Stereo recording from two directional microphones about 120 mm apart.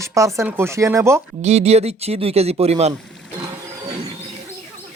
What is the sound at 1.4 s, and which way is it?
Speech, 65° right (ahead or behind).